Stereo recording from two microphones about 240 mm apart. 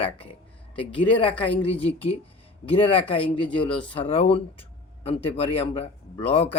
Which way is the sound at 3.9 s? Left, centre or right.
Left.